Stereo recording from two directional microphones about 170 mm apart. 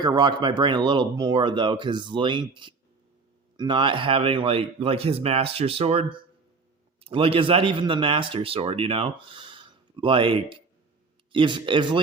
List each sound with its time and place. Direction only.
0.0 s speech: 25° right (ahead or behind)